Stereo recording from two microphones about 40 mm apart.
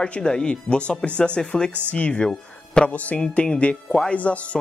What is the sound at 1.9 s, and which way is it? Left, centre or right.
Speech, left.